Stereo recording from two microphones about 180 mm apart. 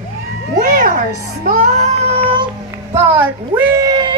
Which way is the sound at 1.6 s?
35° right (ahead or behind).